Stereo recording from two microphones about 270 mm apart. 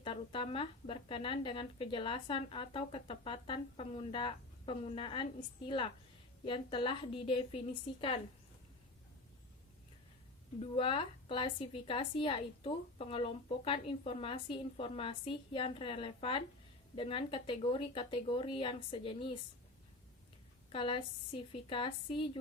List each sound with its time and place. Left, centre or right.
0.0 s speech: centre
10.6 s speech: centre
20.7 s speech: centre